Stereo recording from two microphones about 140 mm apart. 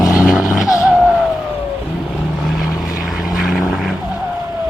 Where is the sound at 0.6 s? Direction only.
25° left (ahead or behind).